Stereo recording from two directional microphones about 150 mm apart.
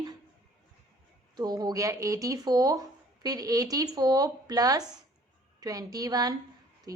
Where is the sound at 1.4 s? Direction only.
25° right (ahead or behind).